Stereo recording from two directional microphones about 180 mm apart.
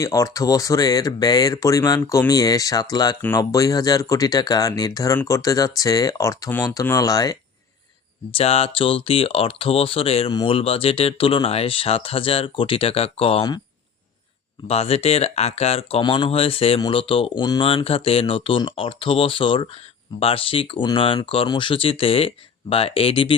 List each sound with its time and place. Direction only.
0.0 s speech: 15° left (ahead or behind)
8.3 s speech: 35° left (ahead or behind)
14.7 s speech: 35° left (ahead or behind)